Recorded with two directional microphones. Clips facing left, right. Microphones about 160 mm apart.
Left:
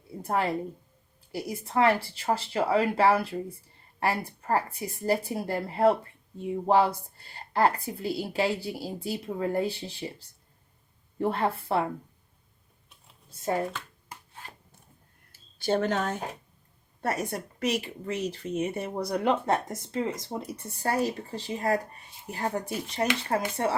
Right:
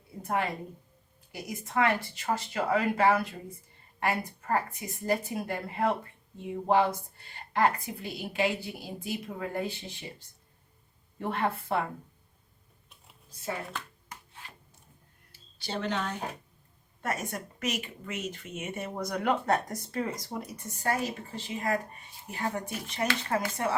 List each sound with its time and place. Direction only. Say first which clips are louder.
0.2 s speech: left 3 dB; 35° left (ahead or behind)
7.5 s speech: left 2 dB; 35° left (ahead or behind)
13.4 s speech: left 8 dB; 45° left (ahead or behind)
15.3 s a sound: left 10 dB; 50° left (ahead or behind)
17.0 s speech: left 4 dB; 35° left (ahead or behind)